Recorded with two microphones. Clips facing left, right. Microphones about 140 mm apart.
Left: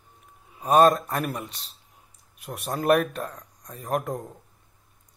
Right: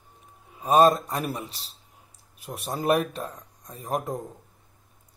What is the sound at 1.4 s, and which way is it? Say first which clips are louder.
Speech: left 1 dB; centre (ahead or behind).